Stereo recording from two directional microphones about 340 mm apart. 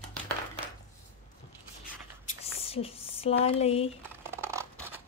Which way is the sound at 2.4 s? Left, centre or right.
Centre.